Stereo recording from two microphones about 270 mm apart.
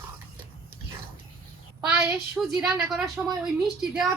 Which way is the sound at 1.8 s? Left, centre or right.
Centre.